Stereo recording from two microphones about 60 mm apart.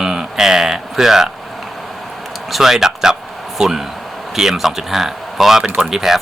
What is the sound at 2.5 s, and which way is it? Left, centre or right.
Speech, centre.